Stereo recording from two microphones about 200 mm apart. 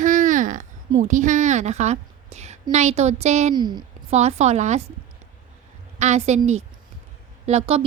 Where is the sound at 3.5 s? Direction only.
20° right (ahead or behind).